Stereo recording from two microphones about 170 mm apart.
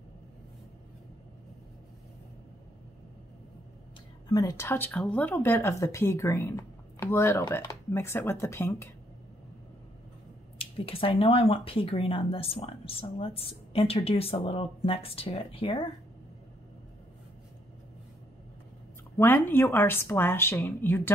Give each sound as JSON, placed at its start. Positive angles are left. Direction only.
{"t": 4.3, "sound": "speech", "side_deg": 20}
{"t": 10.6, "sound": "speech", "side_deg": 35}
{"t": 19.1, "sound": "speech", "side_deg": 10}